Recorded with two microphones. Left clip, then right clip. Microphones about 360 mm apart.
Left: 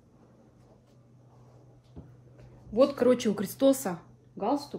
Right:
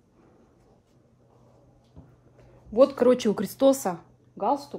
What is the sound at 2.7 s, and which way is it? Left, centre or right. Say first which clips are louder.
A woman's voice: right 4 dB; centre.